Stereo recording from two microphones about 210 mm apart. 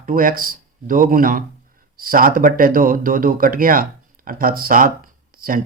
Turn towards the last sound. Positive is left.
turn(degrees=-40)  # may be behind; listen again after turning